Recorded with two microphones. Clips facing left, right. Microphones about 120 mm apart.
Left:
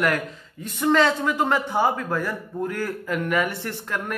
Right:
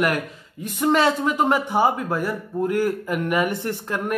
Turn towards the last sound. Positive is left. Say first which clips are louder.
# right 4 dB
turn(degrees=-20)  # may be behind; listen again after turning